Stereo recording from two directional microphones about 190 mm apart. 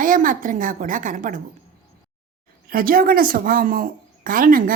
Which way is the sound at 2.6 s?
50° right (ahead or behind).